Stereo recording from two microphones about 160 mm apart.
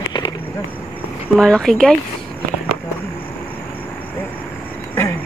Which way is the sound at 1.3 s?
Centre (ahead or behind).